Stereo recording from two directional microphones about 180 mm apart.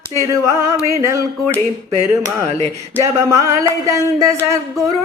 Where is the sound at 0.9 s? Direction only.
15° right (ahead or behind).